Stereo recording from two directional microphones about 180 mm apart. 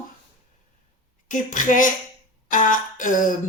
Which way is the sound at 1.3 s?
45° left (ahead or behind).